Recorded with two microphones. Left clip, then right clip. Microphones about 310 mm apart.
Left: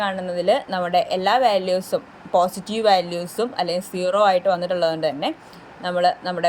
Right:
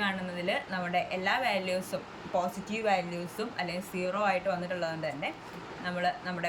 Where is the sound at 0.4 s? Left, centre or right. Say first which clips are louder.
Left 12 dB; centre.